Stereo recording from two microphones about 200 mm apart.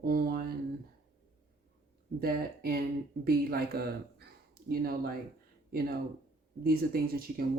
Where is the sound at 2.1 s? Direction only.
50° right (ahead or behind).